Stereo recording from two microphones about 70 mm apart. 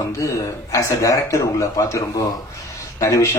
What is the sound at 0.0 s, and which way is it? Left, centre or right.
A man's voice, left.